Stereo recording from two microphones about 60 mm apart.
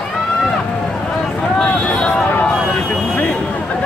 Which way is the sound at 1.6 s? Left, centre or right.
Centre.